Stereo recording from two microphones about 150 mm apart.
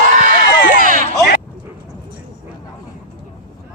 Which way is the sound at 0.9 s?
60° right (ahead or behind).